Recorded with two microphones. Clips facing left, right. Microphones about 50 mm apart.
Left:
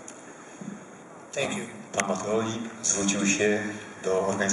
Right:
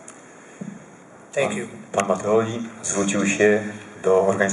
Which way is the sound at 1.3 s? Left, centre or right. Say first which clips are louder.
Right 7 dB; centre.